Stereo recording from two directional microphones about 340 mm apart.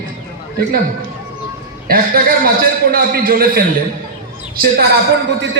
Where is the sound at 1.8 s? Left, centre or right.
Right.